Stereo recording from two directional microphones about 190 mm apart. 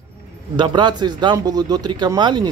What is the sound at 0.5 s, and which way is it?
A man's voice, 25° right (ahead or behind).